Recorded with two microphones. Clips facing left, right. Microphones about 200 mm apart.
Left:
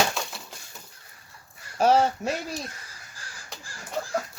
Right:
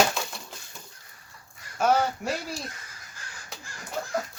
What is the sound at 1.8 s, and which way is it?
Speech, 30° left (ahead or behind).